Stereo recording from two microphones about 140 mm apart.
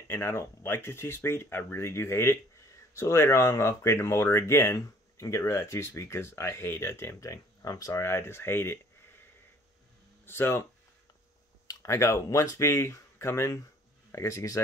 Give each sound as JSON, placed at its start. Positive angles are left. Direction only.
{"t": 0.1, "sound": "speech", "side_deg": 15}
{"t": 10.2, "sound": "speech", "side_deg": 15}